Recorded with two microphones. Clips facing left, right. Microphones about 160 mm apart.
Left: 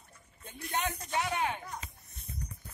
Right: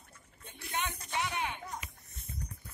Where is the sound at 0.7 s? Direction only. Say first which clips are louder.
Left 3 dB; 40° left (ahead or behind).